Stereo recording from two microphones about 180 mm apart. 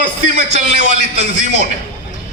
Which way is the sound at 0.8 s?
90° left.